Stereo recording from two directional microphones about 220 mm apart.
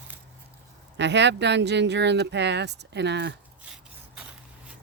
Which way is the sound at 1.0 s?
55° right (ahead or behind).